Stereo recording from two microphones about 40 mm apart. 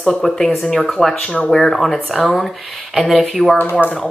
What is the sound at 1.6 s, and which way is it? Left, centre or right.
Speech, centre.